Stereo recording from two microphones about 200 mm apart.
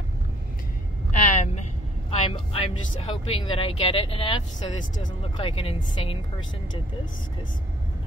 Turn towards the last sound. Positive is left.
turn(degrees=25)  # may be behind; listen again after turning